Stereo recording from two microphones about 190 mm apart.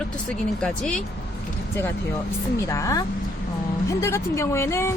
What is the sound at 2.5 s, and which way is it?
Speech, 15° left (ahead or behind).